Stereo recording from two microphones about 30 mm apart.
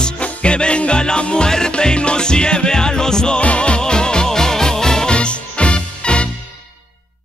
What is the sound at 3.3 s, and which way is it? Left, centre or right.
Music, left.